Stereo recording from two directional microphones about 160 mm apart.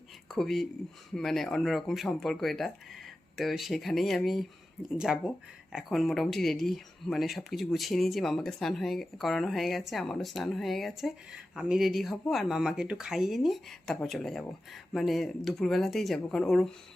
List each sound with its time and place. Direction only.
0.3 s speech: centre (ahead or behind)